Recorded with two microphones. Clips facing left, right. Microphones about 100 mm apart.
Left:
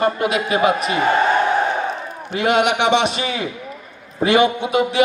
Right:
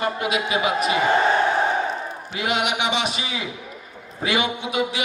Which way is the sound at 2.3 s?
45° left (ahead or behind).